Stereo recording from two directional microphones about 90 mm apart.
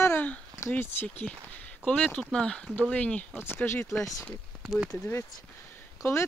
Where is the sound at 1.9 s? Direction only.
10° left (ahead or behind).